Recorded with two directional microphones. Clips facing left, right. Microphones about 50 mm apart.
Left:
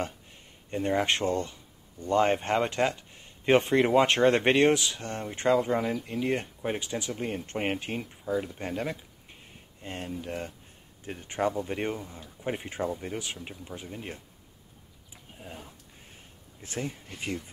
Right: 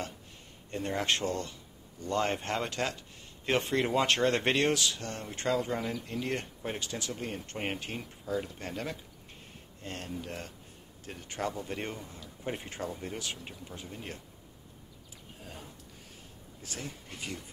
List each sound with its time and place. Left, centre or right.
0.7 s speech: left
6.1 s speech: centre
15.3 s speech: centre
16.6 s speech: left